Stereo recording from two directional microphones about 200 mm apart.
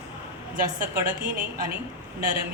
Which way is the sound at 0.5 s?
45° right (ahead or behind).